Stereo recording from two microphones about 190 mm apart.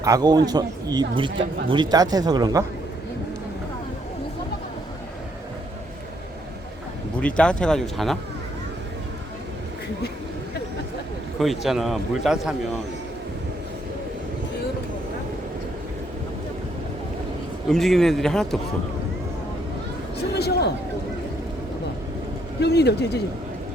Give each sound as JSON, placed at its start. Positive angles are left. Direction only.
{"t": 0.0, "sound": "speech", "side_deg": -20}
{"t": 7.2, "sound": "a man's voice", "side_deg": 5}
{"t": 11.3, "sound": "a man's voice", "side_deg": 0}
{"t": 17.7, "sound": "a man's voice", "side_deg": 0}
{"t": 20.3, "sound": "a sound", "side_deg": 60}
{"t": 22.6, "sound": "a man's voice", "side_deg": 60}